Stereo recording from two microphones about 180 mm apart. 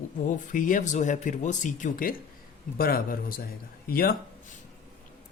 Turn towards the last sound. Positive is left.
turn(degrees=55)  # may be behind; listen again after turning